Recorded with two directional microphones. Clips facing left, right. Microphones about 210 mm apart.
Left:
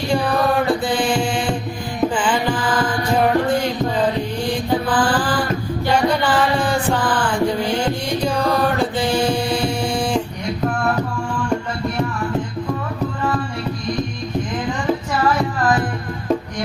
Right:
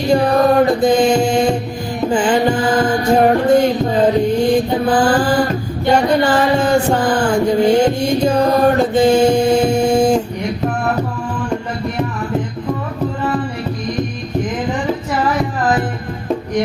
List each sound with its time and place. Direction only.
0.1 s music: 40° right (ahead or behind)
4.9 s mantra: 45° right (ahead or behind)